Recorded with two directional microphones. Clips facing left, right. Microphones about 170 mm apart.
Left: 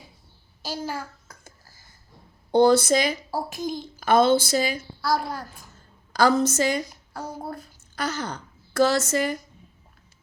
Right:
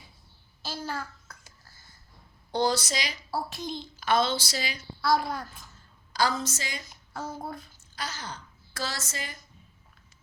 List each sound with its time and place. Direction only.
0.8 s a child's voice: 15° left (ahead or behind)
2.5 s speech: 55° left (ahead or behind)
4.9 s a child's voice: 5° left (ahead or behind)
6.1 s speech: 50° left (ahead or behind)
6.9 s speech: 10° left (ahead or behind)
7.9 s a woman's voice: 60° left (ahead or behind)